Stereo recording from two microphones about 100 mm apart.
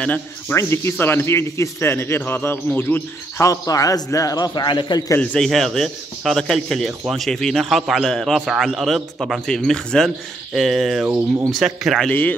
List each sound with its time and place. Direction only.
0.0 s speech: 15° left (ahead or behind)
0.6 s speech: 25° left (ahead or behind)
3.4 s speech: 35° left (ahead or behind)
5.2 s a man's voice: 10° left (ahead or behind)
12.1 s speech: 20° left (ahead or behind)